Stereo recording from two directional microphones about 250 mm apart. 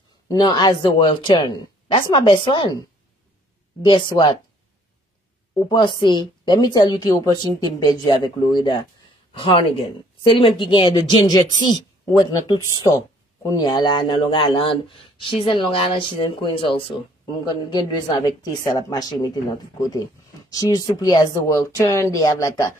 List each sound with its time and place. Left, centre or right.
0.3 s a woman's voice: centre
5.7 s a woman's voice: centre